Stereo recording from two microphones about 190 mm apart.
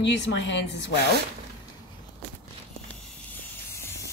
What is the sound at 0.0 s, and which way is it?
Speech, 65° left (ahead or behind).